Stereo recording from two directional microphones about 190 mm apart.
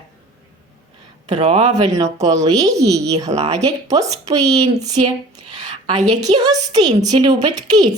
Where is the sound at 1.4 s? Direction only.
30° right (ahead or behind).